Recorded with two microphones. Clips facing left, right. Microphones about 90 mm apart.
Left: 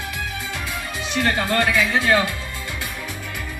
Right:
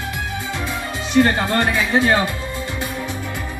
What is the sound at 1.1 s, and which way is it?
Speech, 30° right (ahead or behind).